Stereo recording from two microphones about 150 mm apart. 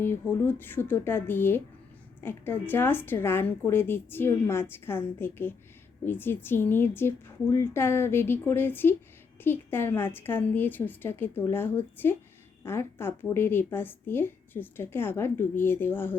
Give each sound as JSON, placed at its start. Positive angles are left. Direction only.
{"t": 0.0, "sound": "a woman's voice", "side_deg": 15}